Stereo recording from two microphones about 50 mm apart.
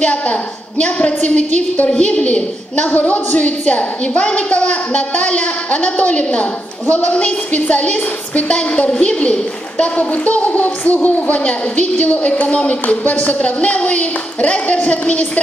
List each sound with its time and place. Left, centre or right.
0.0 s a woman's voice: left